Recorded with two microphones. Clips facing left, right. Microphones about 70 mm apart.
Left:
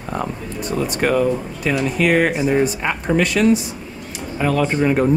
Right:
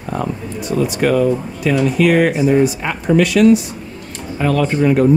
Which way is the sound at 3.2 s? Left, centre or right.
Left.